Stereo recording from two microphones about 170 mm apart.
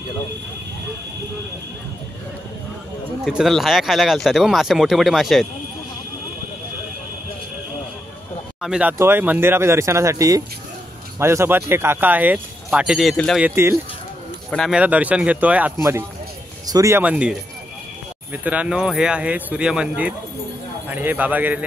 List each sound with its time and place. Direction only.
3.3 s speech: centre (ahead or behind)
8.5 s speech: 5° right (ahead or behind)
13.4 s speech: 15° right (ahead or behind)
14.5 s speech: centre (ahead or behind)
14.8 s speech: 10° right (ahead or behind)